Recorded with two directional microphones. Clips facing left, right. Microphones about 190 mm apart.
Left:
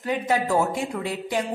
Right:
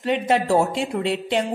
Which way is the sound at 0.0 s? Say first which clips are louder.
Right 3 dB; 25° right (ahead or behind).